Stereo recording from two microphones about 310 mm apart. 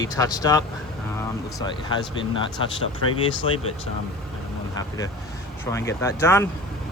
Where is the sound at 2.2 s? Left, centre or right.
Centre.